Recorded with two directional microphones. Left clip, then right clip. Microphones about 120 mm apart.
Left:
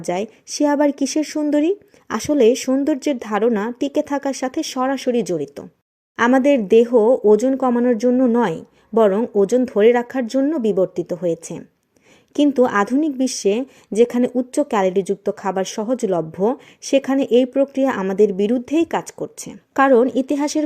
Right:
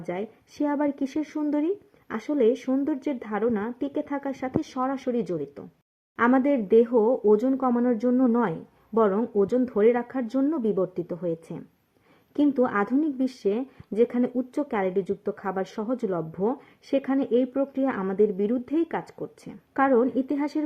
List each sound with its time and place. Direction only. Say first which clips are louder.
0.1 s speech: left 10 dB; 30° left (ahead or behind)
3.2 s speech: left 8 dB; 35° left (ahead or behind); by 8.2 s 10° left (ahead or behind)
8.2 s speech: left 7 dB; 30° left (ahead or behind)
9.3 s speech: left 7 dB; 10° left (ahead or behind)
10.2 s speech: left 7 dB; 10° left (ahead or behind)
12.3 s speech: left 7 dB; 20° left (ahead or behind)
14.3 s speech: left 9 dB; 15° left (ahead or behind)
14.7 s speech: left 7 dB; 30° left (ahead or behind)
15.2 s speech: left 8 dB; 20° left (ahead or behind)
16.5 s speech: left 9 dB; 25° left (ahead or behind)
20.1 s speech: left 7 dB; 35° left (ahead or behind)